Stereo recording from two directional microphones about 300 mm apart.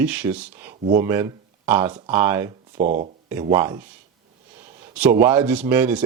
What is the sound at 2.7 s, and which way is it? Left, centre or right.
Speech, right.